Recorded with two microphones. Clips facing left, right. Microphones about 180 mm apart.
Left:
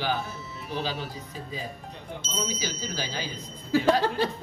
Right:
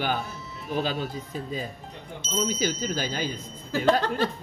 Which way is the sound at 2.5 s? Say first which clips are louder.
Right 6 dB; 50° right (ahead or behind).